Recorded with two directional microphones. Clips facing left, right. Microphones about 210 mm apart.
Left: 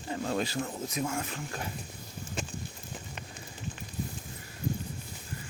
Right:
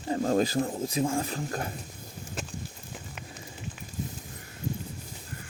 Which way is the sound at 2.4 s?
Centre (ahead or behind).